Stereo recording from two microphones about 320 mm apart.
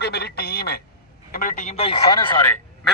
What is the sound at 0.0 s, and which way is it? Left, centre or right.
Telephone, left.